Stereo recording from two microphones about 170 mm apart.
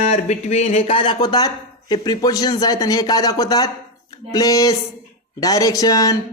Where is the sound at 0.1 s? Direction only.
40° left (ahead or behind).